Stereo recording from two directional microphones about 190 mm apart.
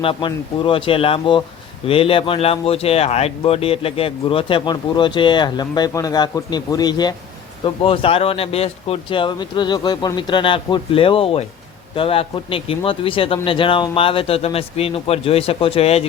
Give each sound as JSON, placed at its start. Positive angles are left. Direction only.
{"t": 0.0, "sound": "speech", "side_deg": 25}